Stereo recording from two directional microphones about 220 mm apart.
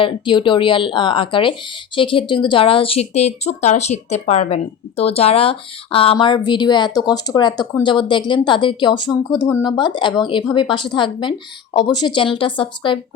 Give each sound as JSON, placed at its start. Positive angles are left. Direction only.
{"t": 0.0, "sound": "speech", "side_deg": 20}